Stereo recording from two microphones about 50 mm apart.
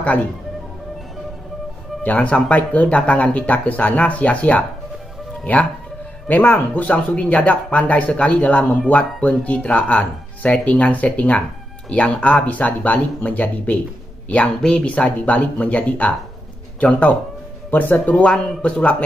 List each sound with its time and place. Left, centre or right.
2.0 s speech: left
14.9 s speech: left
17.6 s speech: left
18.1 s speech: left